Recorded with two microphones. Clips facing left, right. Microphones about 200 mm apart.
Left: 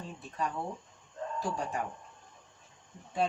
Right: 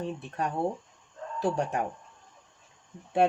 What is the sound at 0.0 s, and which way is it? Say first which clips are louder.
Speech: right 5 dB; 65° right (ahead or behind).